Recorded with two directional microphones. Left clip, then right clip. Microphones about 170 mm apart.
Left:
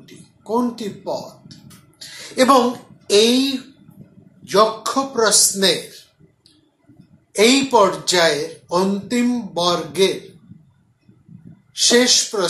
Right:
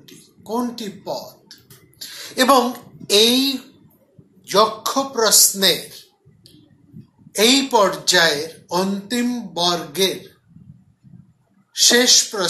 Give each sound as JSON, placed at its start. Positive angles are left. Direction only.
{"t": 0.0, "sound": "music", "side_deg": -30}
{"t": 4.8, "sound": "speech", "side_deg": -35}
{"t": 7.3, "sound": "speech", "side_deg": -35}
{"t": 11.7, "sound": "speech", "side_deg": -35}